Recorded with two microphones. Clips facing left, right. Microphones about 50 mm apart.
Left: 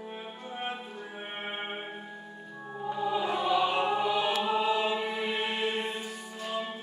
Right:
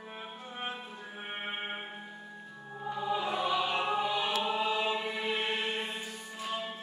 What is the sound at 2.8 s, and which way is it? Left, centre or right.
Choir, centre.